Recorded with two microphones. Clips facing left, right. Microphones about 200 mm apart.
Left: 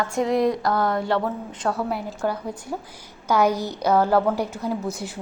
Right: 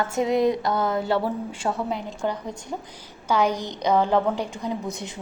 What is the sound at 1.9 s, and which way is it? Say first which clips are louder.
A woman's voice: left 1 dB; 5° left (ahead or behind).